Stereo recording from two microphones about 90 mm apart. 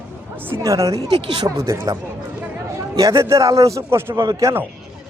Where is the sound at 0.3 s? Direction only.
20° right (ahead or behind).